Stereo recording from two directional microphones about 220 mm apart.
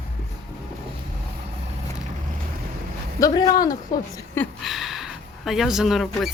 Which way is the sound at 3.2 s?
15° left (ahead or behind).